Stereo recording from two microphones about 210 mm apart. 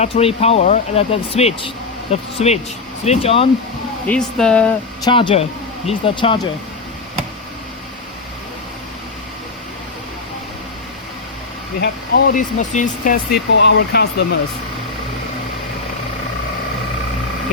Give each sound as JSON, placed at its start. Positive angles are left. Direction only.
{"t": 0.0, "sound": "speech", "side_deg": 30}
{"t": 4.0, "sound": "speech", "side_deg": 5}
{"t": 5.0, "sound": "speech", "side_deg": 25}
{"t": 11.8, "sound": "speech", "side_deg": 45}
{"t": 13.6, "sound": "speech", "side_deg": 55}